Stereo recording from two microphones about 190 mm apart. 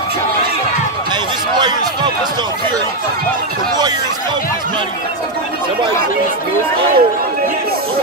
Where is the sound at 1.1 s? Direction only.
20° right (ahead or behind).